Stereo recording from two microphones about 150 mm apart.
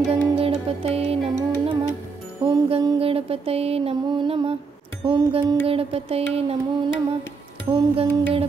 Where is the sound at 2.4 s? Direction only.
35° right (ahead or behind).